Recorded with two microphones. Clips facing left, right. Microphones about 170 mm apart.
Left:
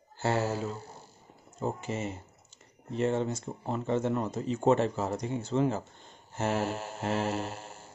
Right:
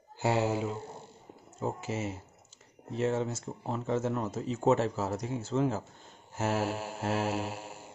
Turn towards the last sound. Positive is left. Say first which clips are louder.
# right 1 dB
turn(degrees=-10)  # may be behind; listen again after turning